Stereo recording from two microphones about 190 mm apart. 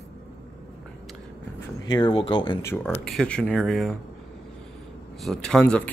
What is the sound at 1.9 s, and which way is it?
Speech, 25° left (ahead or behind).